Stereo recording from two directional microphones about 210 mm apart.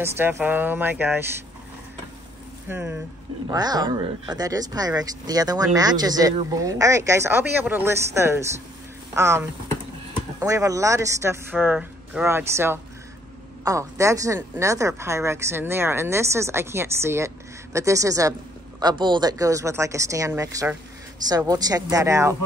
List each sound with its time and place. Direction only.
0.0 s speech: 10° right (ahead or behind)
2.7 s speech: 10° right (ahead or behind)